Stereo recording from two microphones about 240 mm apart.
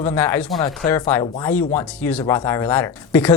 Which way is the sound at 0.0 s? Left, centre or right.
Centre.